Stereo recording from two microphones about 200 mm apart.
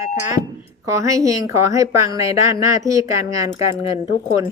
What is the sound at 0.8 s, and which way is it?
Speech, 15° right (ahead or behind).